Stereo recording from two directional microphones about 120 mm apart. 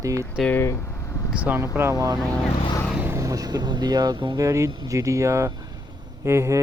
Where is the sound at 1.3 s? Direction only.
10° right (ahead or behind).